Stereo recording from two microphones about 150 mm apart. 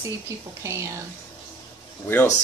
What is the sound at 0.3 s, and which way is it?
Speech, 20° right (ahead or behind).